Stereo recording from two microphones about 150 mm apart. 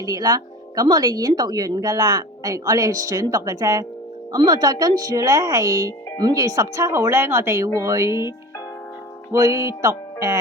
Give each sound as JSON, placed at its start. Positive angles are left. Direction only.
{"t": 0.0, "sound": "speech", "side_deg": -25}
{"t": 9.3, "sound": "speech", "side_deg": -25}